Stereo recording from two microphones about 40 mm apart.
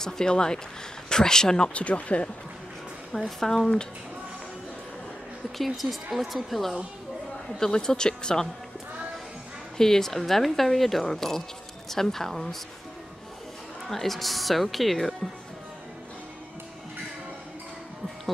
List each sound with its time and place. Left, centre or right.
0.0 s speech: centre
1.7 s speech: left
3.1 s speech: centre
5.8 s speech: centre
7.5 s speech: centre
9.8 s speech: centre
13.8 s speech: centre